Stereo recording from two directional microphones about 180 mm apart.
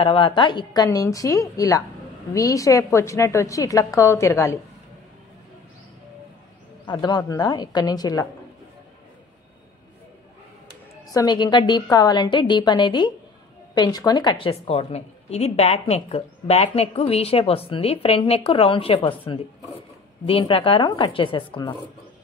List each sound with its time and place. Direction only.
0.0 s a woman's voice: 25° left (ahead or behind)
6.9 s a woman's voice: 25° left (ahead or behind)
11.1 s a woman's voice: 20° left (ahead or behind)